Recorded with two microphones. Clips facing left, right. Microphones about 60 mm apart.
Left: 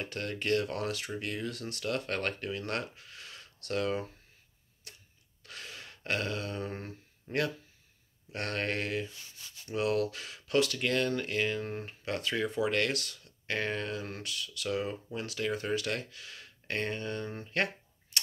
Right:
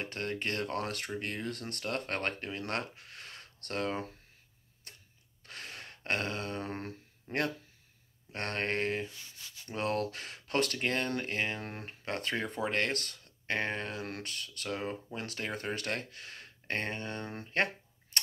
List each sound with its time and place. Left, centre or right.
0.0 s speech: right
5.4 s a sound: right
8.3 s speech: right
13.9 s speech: right
18.1 s tick-tock: right